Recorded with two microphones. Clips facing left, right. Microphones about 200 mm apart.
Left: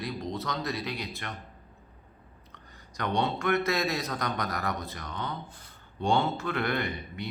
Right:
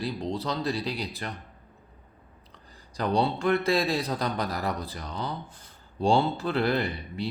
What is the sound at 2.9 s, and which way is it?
Speech, 35° right (ahead or behind).